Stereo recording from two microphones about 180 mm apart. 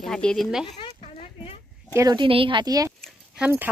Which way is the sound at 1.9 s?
20° right (ahead or behind).